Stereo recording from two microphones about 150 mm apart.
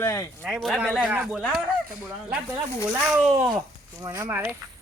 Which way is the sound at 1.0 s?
10° right (ahead or behind).